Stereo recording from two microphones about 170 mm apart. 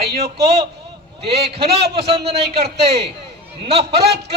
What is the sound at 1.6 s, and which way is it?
Speech, 75° right (ahead or behind).